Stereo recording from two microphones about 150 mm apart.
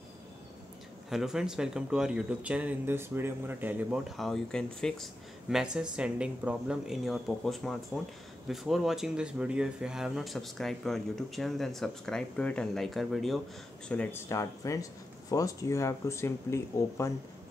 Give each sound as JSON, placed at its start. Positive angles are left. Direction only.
{"t": 1.1, "sound": "speech", "side_deg": -5}
{"t": 4.2, "sound": "speech", "side_deg": 5}
{"t": 14.3, "sound": "speech", "side_deg": 20}